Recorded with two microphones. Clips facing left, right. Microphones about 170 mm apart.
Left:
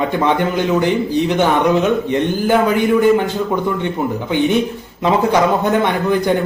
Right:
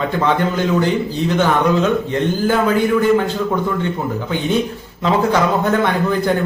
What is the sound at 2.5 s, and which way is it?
Speech, 20° left (ahead or behind).